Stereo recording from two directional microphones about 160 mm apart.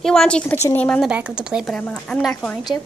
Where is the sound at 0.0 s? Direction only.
5° left (ahead or behind).